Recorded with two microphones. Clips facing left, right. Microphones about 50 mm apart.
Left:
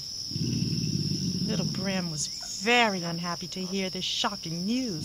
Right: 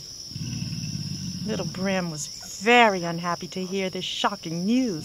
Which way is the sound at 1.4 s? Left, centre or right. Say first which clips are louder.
Right 6 dB; right.